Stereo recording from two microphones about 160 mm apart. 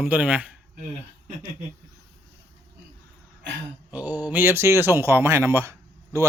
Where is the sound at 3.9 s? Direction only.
10° right (ahead or behind).